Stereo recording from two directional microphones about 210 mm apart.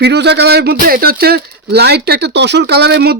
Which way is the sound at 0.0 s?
55° right (ahead or behind).